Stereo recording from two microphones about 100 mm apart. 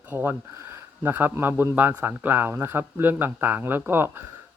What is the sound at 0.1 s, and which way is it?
Speech, 20° right (ahead or behind).